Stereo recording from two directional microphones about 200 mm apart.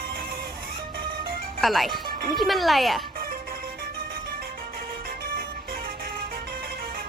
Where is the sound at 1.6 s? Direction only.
Centre (ahead or behind).